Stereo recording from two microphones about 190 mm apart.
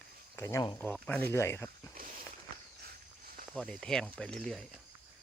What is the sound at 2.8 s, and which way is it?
Walk, 50° right (ahead or behind).